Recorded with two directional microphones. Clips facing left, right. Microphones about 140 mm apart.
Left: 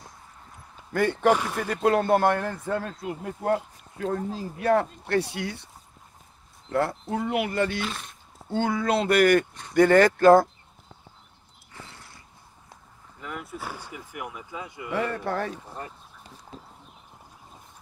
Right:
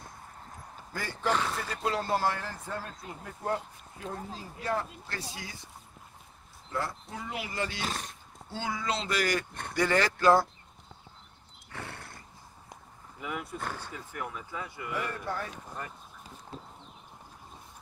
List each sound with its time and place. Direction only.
0.9 s a man's voice: 60° left (ahead or behind)
1.3 s speech: 15° left (ahead or behind)
1.7 s a man's voice: 60° left (ahead or behind)
6.7 s a man's voice: 60° left (ahead or behind)
7.8 s speech: 40° right (ahead or behind)
8.5 s a man's voice: 55° left (ahead or behind)
9.5 s speech: 55° right (ahead or behind)
9.8 s speech: 50° left (ahead or behind)
11.7 s a sound: 60° right (ahead or behind)
13.2 s speech: centre (ahead or behind); by 14.9 s 20° left (ahead or behind)
14.9 s speech: 80° left